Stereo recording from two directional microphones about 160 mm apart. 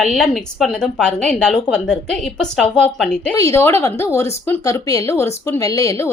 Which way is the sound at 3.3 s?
20° left (ahead or behind).